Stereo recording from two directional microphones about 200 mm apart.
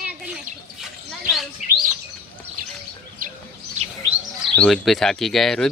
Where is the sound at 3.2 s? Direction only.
45° right (ahead or behind).